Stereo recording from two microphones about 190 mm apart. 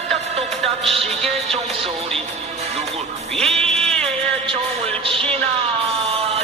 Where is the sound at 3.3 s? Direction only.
5° left (ahead or behind).